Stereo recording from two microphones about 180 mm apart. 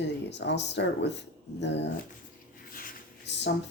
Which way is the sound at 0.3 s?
75° left (ahead or behind).